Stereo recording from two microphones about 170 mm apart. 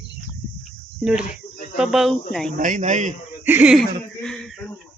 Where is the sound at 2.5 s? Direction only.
50° right (ahead or behind).